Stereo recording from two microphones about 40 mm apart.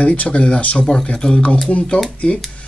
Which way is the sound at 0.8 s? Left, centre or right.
Left.